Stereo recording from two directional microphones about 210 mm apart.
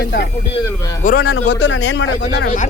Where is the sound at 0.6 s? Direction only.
15° left (ahead or behind).